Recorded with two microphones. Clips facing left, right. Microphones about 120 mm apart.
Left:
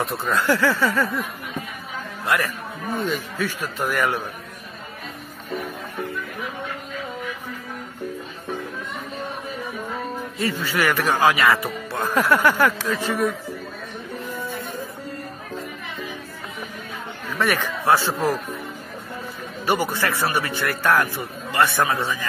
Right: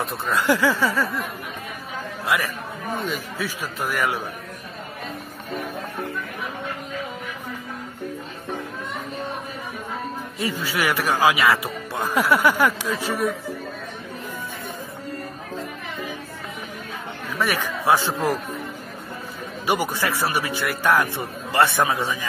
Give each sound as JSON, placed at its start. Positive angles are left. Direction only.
{"t": 0.0, "sound": "a man's voice", "side_deg": 0}
{"t": 0.4, "sound": "a man's voice", "side_deg": -15}
{"t": 2.2, "sound": "a man's voice", "side_deg": 0}
{"t": 10.4, "sound": "a man's voice", "side_deg": -10}
{"t": 11.9, "sound": "a man's voice", "side_deg": -15}
{"t": 17.3, "sound": "a man's voice", "side_deg": -10}
{"t": 19.6, "sound": "a man's voice", "side_deg": -15}
{"t": 21.2, "sound": "speech", "side_deg": -30}
{"t": 21.7, "sound": "a man's voice", "side_deg": -15}